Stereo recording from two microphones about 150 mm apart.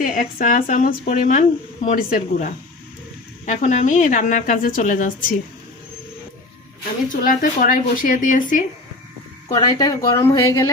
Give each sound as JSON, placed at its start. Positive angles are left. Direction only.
{"t": 0.0, "sound": "speech", "side_deg": 65}
{"t": 3.4, "sound": "speech", "side_deg": 50}
{"t": 7.1, "sound": "speech", "side_deg": 65}
{"t": 9.6, "sound": "speech", "side_deg": 25}